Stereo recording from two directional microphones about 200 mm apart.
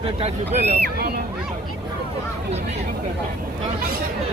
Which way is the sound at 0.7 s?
50° right (ahead or behind).